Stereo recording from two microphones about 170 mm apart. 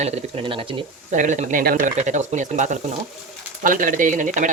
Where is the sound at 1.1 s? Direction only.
45° right (ahead or behind).